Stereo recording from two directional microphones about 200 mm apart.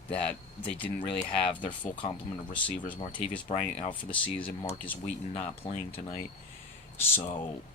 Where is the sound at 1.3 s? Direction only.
25° left (ahead or behind).